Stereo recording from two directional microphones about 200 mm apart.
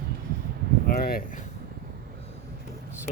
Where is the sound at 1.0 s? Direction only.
45° left (ahead or behind).